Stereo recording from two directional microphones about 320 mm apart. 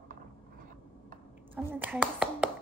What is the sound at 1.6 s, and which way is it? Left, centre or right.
Speech, centre.